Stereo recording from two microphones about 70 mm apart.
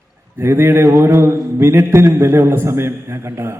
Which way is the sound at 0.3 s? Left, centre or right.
Right.